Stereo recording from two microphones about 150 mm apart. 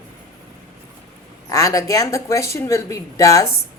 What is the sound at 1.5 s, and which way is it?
A woman's voice, 20° left (ahead or behind).